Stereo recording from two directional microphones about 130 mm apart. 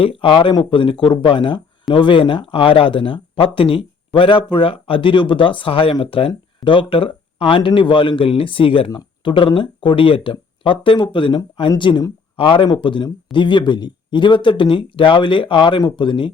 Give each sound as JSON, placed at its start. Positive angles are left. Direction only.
{"t": 0.0, "sound": "speech", "side_deg": 45}